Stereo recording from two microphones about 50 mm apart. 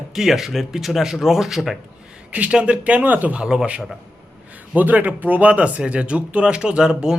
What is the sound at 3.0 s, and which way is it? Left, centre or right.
Speech, right.